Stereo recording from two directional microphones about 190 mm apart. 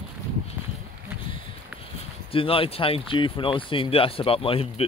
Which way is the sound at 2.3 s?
30° left (ahead or behind).